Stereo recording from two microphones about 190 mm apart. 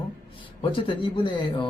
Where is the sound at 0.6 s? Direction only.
25° left (ahead or behind).